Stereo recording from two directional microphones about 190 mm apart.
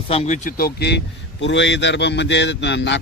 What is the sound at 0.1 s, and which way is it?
A man's voice, 35° left (ahead or behind).